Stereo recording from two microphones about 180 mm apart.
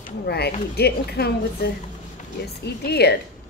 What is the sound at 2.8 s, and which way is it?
Speech, 65° left (ahead or behind).